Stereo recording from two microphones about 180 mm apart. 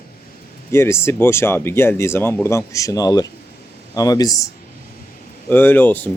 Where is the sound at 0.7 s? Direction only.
15° left (ahead or behind).